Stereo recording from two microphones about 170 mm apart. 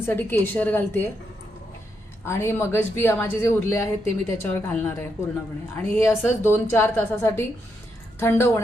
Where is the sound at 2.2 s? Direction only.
15° left (ahead or behind).